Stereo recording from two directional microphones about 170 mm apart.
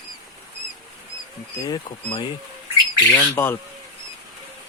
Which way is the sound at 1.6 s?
25° left (ahead or behind).